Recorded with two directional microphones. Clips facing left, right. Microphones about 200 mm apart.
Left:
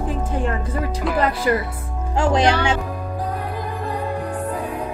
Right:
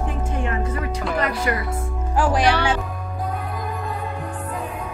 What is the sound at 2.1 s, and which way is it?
Speech, 25° left (ahead or behind).